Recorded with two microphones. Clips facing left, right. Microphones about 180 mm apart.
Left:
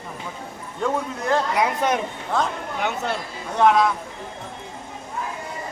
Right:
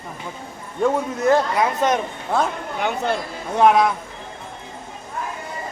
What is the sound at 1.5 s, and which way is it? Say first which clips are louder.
Speech: right 2 dB; 10° left (ahead or behind).